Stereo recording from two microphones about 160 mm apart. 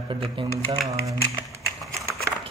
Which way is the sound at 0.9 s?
20° right (ahead or behind).